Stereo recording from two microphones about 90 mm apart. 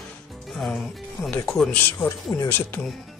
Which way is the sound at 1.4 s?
5° left (ahead or behind).